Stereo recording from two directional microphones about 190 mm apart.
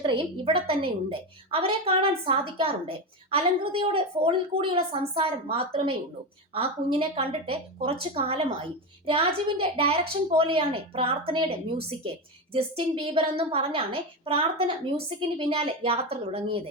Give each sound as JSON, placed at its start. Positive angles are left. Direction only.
{"t": 0.0, "sound": "a woman's voice", "side_deg": -30}